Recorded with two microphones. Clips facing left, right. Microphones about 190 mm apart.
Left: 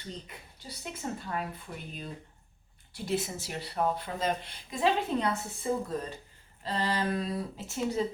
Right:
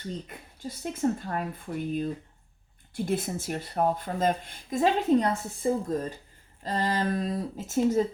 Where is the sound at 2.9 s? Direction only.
50° right (ahead or behind).